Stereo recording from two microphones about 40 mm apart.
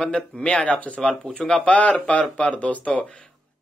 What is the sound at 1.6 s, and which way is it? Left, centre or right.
A man's voice, left.